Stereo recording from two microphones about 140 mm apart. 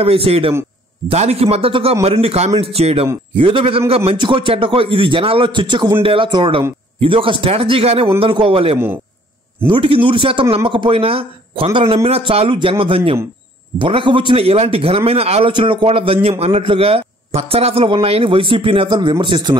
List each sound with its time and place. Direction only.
0.0 s a man's voice: 45° right (ahead or behind)